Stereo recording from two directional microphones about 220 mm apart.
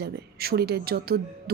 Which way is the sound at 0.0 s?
45° right (ahead or behind).